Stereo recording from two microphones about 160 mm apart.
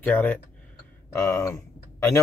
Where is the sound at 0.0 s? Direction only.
10° left (ahead or behind).